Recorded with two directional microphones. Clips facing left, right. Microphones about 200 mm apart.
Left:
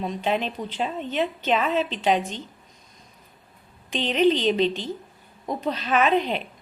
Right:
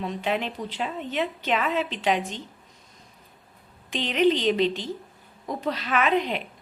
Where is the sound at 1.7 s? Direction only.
15° right (ahead or behind).